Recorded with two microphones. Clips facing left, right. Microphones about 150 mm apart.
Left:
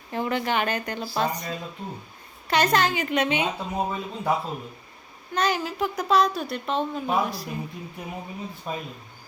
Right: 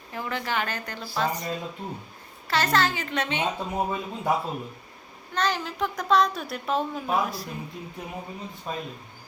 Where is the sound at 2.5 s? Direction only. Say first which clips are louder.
Left 2 dB; 15° left (ahead or behind).